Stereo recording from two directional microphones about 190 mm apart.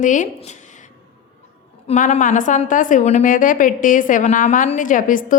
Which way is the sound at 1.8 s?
40° left (ahead or behind).